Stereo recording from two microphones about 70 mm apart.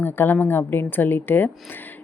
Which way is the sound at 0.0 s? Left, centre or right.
Left.